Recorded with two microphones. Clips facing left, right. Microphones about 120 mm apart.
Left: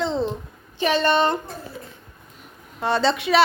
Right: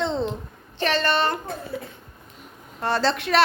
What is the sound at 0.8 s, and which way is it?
Speech, 15° left (ahead or behind).